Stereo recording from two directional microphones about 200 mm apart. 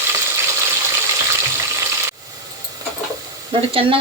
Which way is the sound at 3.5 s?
25° right (ahead or behind).